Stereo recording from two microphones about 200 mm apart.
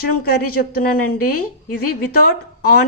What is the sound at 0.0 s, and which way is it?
A woman's voice, 50° left (ahead or behind).